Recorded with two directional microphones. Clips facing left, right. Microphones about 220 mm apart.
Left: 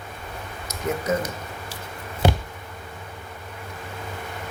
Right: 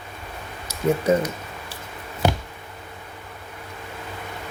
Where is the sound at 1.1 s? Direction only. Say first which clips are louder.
Right 5 dB; 30° right (ahead or behind).